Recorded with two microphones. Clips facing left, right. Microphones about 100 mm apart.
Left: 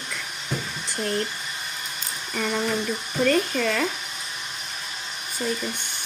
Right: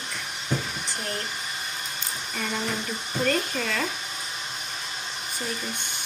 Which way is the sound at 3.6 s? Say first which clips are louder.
Left 4 dB; 50° left (ahead or behind).